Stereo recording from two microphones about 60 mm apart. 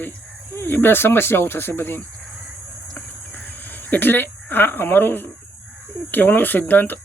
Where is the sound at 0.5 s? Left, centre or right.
Left.